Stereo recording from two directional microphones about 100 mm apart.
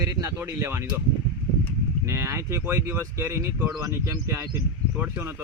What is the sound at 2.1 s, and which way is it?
Speech, 30° right (ahead or behind).